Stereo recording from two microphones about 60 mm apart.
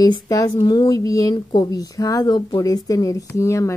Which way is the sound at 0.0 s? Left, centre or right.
Left.